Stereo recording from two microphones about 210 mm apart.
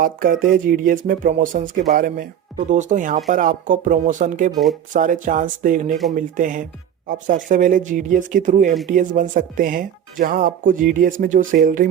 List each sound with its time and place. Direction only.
0.0 s speech: 40° right (ahead or behind)